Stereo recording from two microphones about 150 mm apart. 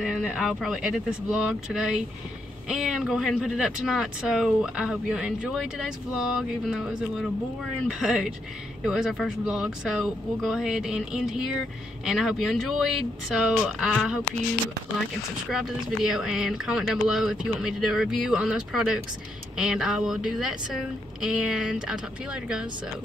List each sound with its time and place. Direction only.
0.0 s speech: 5° right (ahead or behind)
15.5 s speech: 5° right (ahead or behind)